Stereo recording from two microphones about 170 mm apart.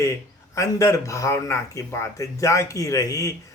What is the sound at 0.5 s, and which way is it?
Speech, 20° left (ahead or behind).